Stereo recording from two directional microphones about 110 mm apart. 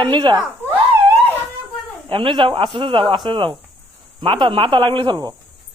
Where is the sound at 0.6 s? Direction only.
20° right (ahead or behind).